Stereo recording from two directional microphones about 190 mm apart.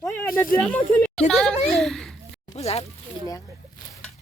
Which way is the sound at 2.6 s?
35° left (ahead or behind).